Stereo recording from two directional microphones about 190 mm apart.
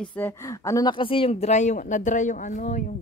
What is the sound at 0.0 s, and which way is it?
Speech, 10° left (ahead or behind).